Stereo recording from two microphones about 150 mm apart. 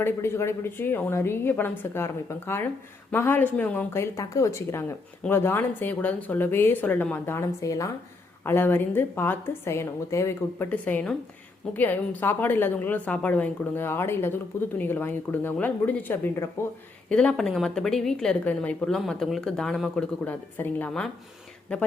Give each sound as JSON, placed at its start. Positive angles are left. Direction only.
{"t": 0.0, "sound": "a woman's voice", "side_deg": 15}